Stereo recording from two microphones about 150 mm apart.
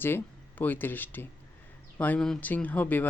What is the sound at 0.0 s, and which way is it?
Speech, 15° left (ahead or behind).